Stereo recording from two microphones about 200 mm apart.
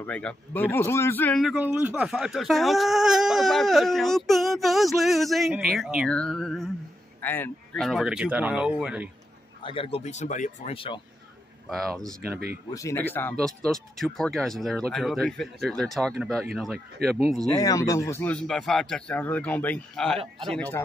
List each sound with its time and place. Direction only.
0.0 s a man's voice: 5° left (ahead or behind)
1.4 s speech: 5° right (ahead or behind)
9.6 s speech: 25° left (ahead or behind)
11.7 s speech: centre (ahead or behind)
12.2 s speech: 50° right (ahead or behind)
12.7 s speech: 15° left (ahead or behind)
17.0 s speech: 50° right (ahead or behind)
17.5 s a man's voice: 15° left (ahead or behind)